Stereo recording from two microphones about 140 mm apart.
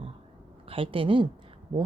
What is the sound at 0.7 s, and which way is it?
Speech, 40° right (ahead or behind).